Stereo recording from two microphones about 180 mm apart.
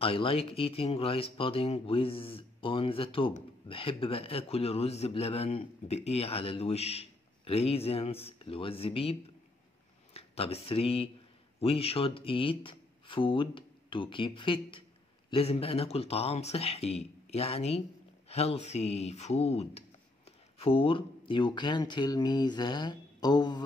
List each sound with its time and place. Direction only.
0.0 s a man's voice: 30° left (ahead or behind)
10.1 s a man's voice: 35° left (ahead or behind)